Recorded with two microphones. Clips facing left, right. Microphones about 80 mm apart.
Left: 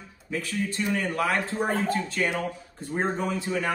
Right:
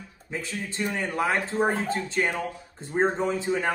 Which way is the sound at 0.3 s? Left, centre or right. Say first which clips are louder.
Left 4 dB; right.